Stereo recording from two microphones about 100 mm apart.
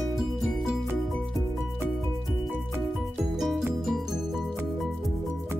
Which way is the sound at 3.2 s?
5° right (ahead or behind).